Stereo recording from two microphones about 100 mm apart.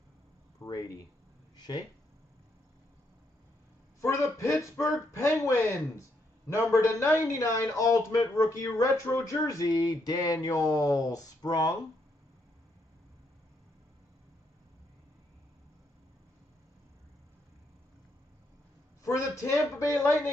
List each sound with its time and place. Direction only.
0.7 s speech: 35° left (ahead or behind)
4.0 s speech: 30° left (ahead or behind)
19.0 s a man's voice: 30° left (ahead or behind)